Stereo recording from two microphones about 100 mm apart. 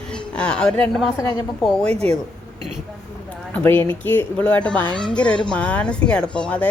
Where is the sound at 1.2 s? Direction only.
40° left (ahead or behind).